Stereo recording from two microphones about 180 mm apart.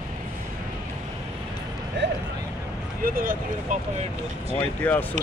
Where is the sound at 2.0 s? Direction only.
75° right (ahead or behind).